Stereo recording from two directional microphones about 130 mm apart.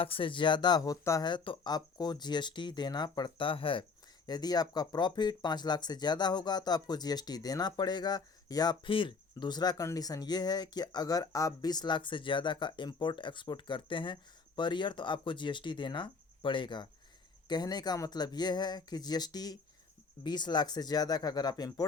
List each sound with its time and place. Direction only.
0.0 s speech: 45° left (ahead or behind)
4.3 s speech: 30° left (ahead or behind)